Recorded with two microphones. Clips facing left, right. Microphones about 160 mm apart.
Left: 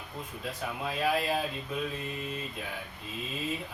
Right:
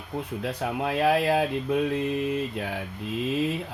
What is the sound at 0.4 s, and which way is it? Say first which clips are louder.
Speech: right 6 dB; 75° right (ahead or behind).